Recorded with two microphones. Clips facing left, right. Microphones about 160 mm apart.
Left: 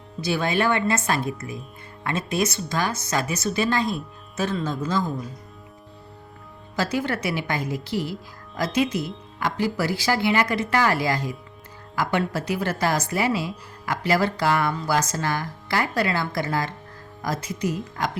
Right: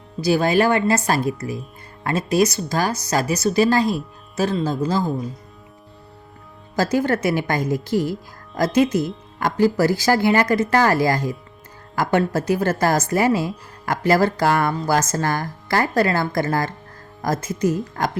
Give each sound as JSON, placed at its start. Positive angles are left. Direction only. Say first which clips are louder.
{"t": 0.2, "sound": "speech", "louder": "right 6 dB", "side_deg": -40}
{"t": 6.7, "sound": "a woman's voice", "louder": "right 6 dB", "side_deg": -45}